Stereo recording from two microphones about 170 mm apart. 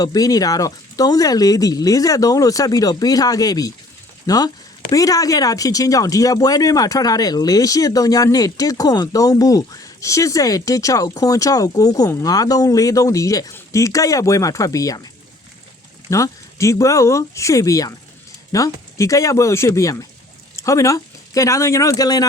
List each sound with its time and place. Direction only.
0.0 s speech: 20° left (ahead or behind)
16.0 s speech: 20° left (ahead or behind)